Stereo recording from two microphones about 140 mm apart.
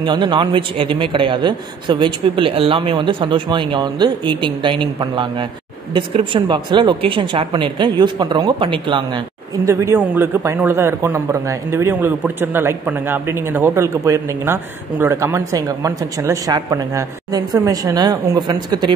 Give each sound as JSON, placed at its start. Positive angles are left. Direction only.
{"t": 0.0, "sound": "a man's voice", "side_deg": -35}
{"t": 9.7, "sound": "a man's voice", "side_deg": -20}